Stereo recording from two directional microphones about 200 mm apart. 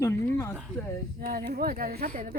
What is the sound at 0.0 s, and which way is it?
Speech, 15° left (ahead or behind).